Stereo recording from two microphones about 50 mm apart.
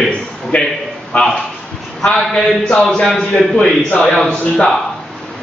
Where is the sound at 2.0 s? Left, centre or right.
Centre.